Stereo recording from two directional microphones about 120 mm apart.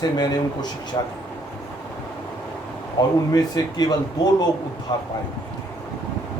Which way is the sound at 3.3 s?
30° left (ahead or behind).